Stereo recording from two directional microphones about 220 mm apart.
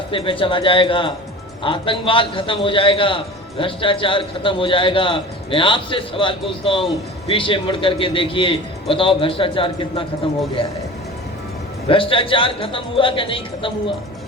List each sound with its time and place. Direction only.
0.1 s a man's voice: 25° left (ahead or behind)
11.9 s a man's voice: 25° left (ahead or behind)